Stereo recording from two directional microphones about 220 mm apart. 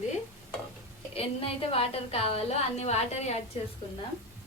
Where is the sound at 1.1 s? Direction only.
25° left (ahead or behind).